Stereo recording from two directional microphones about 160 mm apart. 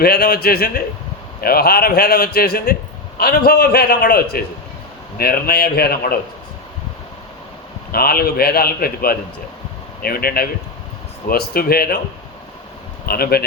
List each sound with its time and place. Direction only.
0.0 s a man's voice: 75° left (ahead or behind)
7.9 s a man's voice: 70° left (ahead or behind)
13.1 s a man's voice: 75° left (ahead or behind)